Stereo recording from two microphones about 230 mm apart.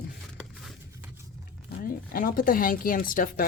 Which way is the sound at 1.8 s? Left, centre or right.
Left.